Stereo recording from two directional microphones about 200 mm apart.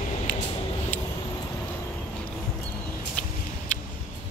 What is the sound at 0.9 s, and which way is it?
Vehicle, 10° left (ahead or behind).